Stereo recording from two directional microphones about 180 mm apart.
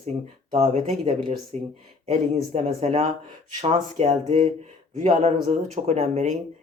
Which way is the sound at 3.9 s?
40° right (ahead or behind).